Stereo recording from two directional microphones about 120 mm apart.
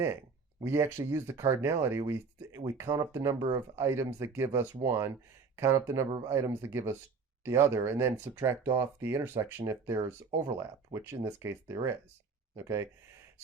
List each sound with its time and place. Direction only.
0.6 s speech: 20° right (ahead or behind)